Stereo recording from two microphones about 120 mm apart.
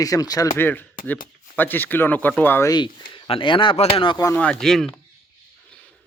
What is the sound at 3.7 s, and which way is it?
Speech, 55° left (ahead or behind).